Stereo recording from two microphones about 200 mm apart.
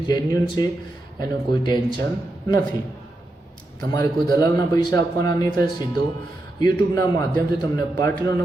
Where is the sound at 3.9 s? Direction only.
15° left (ahead or behind).